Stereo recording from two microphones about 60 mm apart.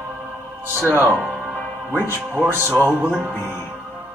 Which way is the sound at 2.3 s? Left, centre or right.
Right.